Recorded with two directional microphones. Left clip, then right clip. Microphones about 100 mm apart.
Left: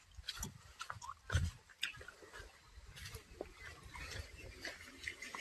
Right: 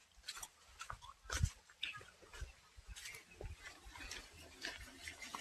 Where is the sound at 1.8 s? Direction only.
90° left.